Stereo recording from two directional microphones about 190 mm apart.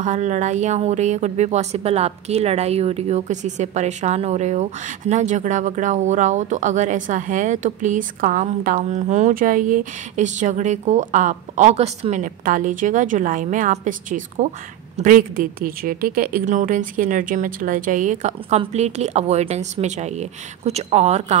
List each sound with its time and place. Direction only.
0.0 s a woman's voice: 40° right (ahead or behind)